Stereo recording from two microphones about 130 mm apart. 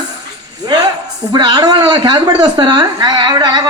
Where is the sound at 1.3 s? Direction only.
30° right (ahead or behind).